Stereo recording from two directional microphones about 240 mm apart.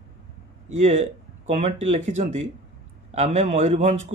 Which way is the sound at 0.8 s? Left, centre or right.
Right.